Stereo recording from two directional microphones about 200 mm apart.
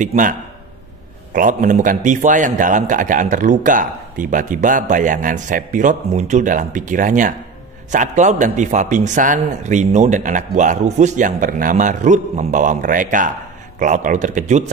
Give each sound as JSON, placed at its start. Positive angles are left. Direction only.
{"t": 0.0, "sound": "a man's voice", "side_deg": -40}